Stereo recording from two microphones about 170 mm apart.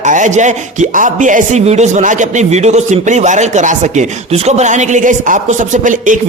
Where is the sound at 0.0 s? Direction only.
45° right (ahead or behind).